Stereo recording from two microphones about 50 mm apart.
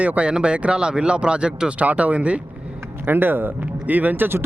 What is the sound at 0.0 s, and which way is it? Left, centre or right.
Speech, right.